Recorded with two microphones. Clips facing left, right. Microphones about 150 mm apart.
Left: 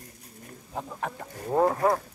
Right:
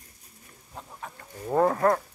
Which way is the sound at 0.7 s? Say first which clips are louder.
Left 8 dB; 65° left (ahead or behind).